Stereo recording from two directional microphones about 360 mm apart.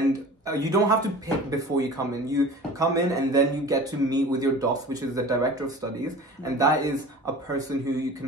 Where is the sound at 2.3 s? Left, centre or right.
Centre.